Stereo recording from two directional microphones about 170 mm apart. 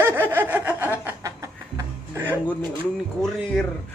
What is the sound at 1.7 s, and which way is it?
Music, 15° right (ahead or behind).